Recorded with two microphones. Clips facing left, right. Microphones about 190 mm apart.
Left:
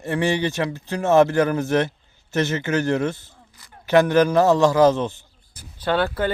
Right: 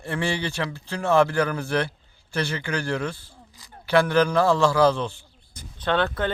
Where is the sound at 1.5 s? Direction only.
45° left (ahead or behind).